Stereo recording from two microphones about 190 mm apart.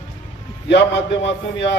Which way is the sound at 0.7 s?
65° left (ahead or behind).